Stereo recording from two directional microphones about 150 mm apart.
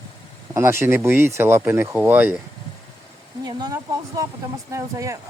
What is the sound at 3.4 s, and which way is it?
Speech, 25° right (ahead or behind).